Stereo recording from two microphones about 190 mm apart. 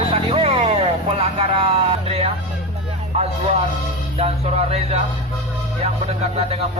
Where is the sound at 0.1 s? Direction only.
30° right (ahead or behind).